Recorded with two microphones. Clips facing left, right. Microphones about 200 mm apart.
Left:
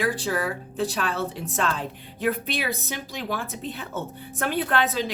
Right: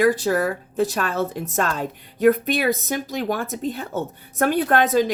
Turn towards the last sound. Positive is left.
turn(degrees=-45)  # may be behind; listen again after turning